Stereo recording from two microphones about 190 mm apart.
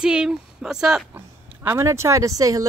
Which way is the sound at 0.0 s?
5° right (ahead or behind).